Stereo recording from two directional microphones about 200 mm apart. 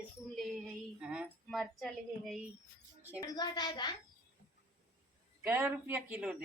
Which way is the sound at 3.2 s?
20° left (ahead or behind).